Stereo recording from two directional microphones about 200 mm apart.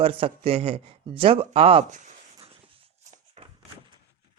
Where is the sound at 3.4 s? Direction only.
35° right (ahead or behind).